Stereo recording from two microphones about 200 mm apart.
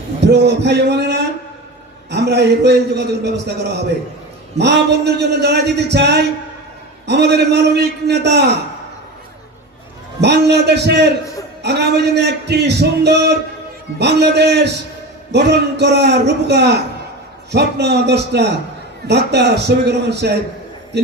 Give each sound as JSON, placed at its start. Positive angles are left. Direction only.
{"t": 0.2, "sound": "a man's voice", "side_deg": -60}
{"t": 10.2, "sound": "a man's voice", "side_deg": -55}